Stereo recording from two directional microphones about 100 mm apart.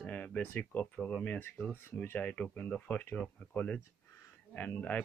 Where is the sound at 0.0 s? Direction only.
15° left (ahead or behind).